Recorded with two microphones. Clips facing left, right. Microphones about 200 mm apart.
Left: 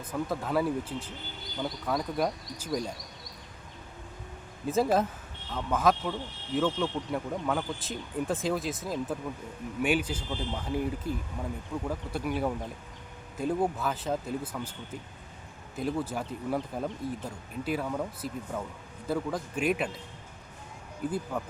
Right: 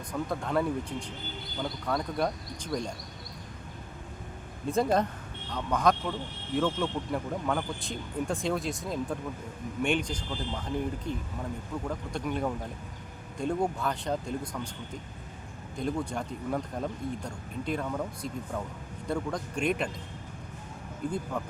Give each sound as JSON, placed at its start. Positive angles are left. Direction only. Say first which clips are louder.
{"t": 0.1, "sound": "speech", "louder": "even", "side_deg": 5}
{"t": 4.6, "sound": "a man's voice", "louder": "even", "side_deg": 5}
{"t": 15.7, "sound": "speech", "louder": "even", "side_deg": 5}
{"t": 21.0, "sound": "speech", "louder": "left 1 dB", "side_deg": 5}